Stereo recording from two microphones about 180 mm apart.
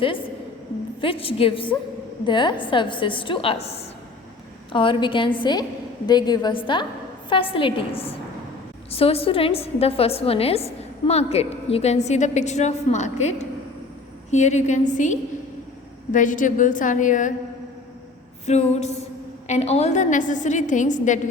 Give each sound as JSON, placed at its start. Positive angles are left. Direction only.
{"t": 1.0, "sound": "a woman's voice", "side_deg": 30}
{"t": 18.4, "sound": "a woman's voice", "side_deg": 35}